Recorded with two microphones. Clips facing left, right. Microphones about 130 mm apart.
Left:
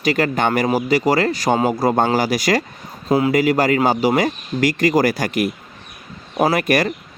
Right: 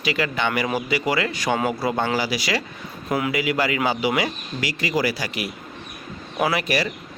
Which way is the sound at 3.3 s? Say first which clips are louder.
Left 7 dB; 45° left (ahead or behind).